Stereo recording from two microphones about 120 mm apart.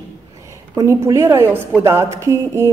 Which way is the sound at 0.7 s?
25° right (ahead or behind).